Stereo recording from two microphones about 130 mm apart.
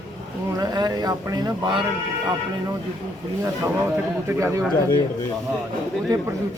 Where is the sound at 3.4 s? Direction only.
20° right (ahead or behind).